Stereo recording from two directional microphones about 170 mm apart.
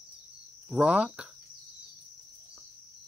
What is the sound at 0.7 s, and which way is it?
Speech, 5° right (ahead or behind).